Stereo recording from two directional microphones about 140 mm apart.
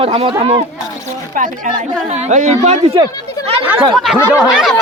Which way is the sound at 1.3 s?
70° right (ahead or behind).